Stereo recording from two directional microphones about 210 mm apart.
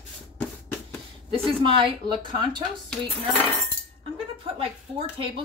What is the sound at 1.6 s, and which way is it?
Speech, 25° right (ahead or behind).